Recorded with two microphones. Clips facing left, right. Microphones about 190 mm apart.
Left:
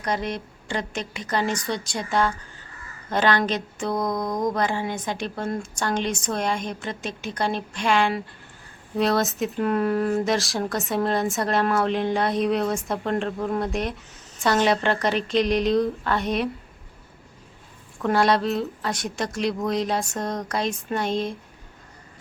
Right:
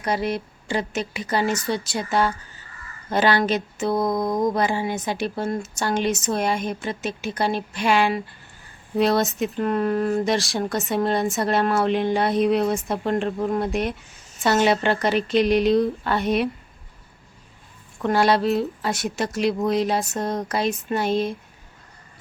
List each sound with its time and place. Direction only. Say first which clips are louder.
0.0 s a woman's voice: right 3 dB; 10° right (ahead or behind)
4.1 s mantra: right 4 dB; 25° right (ahead or behind)
4.4 s speech: right 2 dB; 10° right (ahead or behind)
18.0 s speech: right 1 dB; centre (ahead or behind)